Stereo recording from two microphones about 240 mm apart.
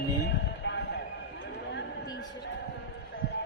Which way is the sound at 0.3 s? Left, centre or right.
Left.